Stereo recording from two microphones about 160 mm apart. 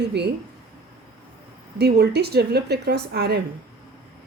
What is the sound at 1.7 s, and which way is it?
A woman's voice, 90° right.